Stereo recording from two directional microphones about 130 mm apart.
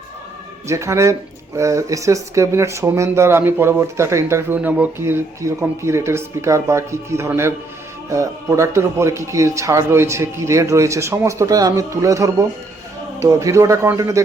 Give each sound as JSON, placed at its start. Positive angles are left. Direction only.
{"t": 0.7, "sound": "speech", "side_deg": -20}